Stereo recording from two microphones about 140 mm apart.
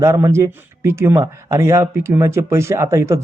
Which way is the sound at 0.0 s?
20° right (ahead or behind).